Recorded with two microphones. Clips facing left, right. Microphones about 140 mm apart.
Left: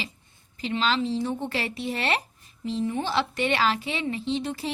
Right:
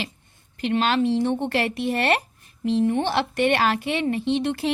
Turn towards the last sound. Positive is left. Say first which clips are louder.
# right 5 dB
turn(degrees=-65)  # may be behind; listen again after turning